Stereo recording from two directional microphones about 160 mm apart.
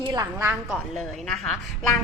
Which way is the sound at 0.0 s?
25° right (ahead or behind).